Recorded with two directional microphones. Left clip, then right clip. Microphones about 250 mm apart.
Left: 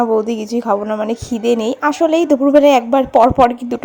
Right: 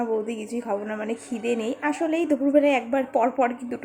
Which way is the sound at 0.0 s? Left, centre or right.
Left.